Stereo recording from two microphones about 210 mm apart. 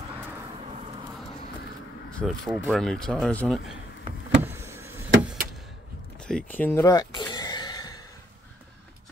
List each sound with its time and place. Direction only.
2.1 s speech: centre (ahead or behind)
4.4 s vehicle: 10° right (ahead or behind)
6.1 s a sound: 5° left (ahead or behind)